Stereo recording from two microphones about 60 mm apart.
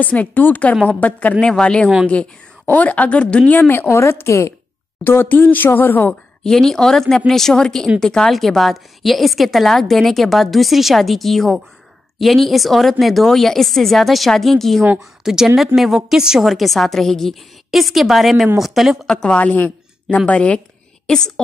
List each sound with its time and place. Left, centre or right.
0.0 s speech: left
1.4 s a woman's voice: centre
2.6 s speech: left
4.0 s a woman's voice: left
5.0 s speech: left
6.4 s a woman's voice: centre
19.0 s a woman's voice: centre
19.3 s speech: left